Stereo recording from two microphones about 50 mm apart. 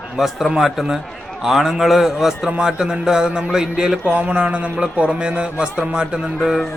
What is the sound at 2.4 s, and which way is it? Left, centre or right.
A man's voice, centre.